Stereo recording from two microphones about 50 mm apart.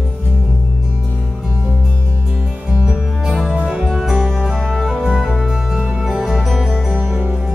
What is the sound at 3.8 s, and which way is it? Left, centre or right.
Music, centre.